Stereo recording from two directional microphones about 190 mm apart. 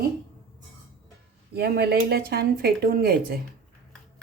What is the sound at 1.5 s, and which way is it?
Speech, 55° right (ahead or behind).